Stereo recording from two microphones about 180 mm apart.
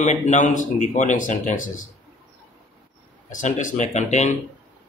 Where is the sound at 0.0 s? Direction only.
40° left (ahead or behind).